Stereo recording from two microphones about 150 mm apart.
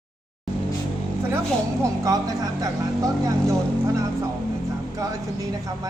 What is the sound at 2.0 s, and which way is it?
Speech, 25° right (ahead or behind).